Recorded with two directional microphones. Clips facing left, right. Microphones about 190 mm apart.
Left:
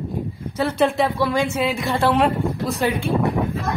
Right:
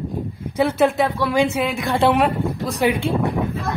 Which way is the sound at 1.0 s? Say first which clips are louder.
Right 1 dB; 5° left (ahead or behind).